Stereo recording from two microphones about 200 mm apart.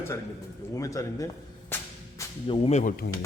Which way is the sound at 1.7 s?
10° left (ahead or behind).